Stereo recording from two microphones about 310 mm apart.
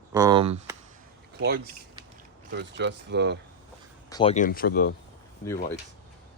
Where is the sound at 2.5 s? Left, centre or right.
Right.